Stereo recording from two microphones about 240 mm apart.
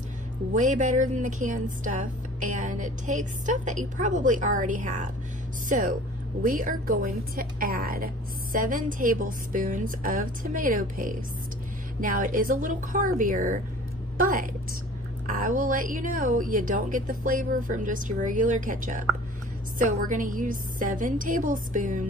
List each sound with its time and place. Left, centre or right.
0.5 s a woman's voice: right